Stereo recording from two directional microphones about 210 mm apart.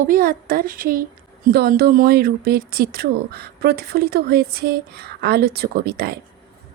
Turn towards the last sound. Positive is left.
turn(degrees=-45)  # may be behind; listen again after turning